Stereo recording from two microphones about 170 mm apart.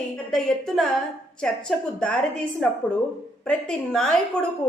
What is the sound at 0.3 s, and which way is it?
A man's voice, 5° left (ahead or behind).